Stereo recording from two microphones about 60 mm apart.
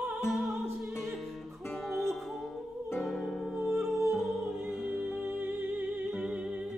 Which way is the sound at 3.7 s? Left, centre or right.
Right.